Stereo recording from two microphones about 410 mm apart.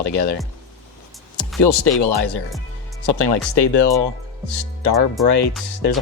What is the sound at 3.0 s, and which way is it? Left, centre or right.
Speech, left.